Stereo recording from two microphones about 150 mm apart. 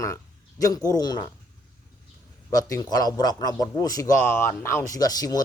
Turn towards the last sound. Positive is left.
turn(degrees=25)  # may be behind; listen again after turning